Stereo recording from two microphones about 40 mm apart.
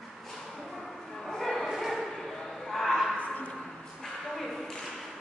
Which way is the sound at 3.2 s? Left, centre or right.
Left.